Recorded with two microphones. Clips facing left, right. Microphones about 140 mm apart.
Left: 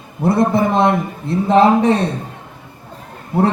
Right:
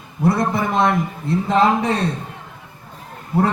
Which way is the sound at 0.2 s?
30° left (ahead or behind).